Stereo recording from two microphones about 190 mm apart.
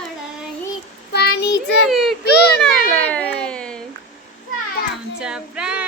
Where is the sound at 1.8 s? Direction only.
Centre (ahead or behind).